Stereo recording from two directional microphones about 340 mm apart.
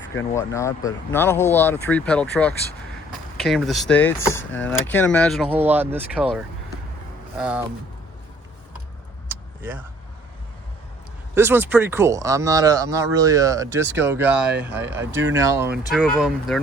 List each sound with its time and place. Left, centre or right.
0.3 s speech: centre
11.3 s speech: centre
14.8 s speech: right
15.3 s speech: centre
15.8 s speech: centre